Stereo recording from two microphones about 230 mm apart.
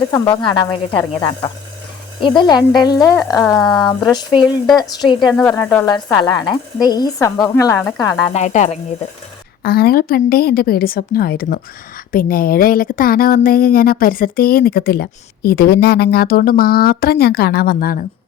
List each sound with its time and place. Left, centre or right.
0.1 s speech: centre
2.2 s speech: centre
5.3 s speech: centre
6.1 s speech: centre
7.8 s speech: centre
8.2 s speech: left
9.6 s speech: left